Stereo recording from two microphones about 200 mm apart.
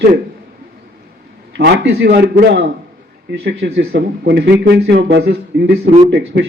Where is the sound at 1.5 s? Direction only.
55° right (ahead or behind).